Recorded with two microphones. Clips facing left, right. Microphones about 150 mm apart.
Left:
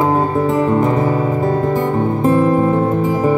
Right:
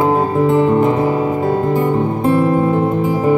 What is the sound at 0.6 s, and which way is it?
Music, 40° left (ahead or behind).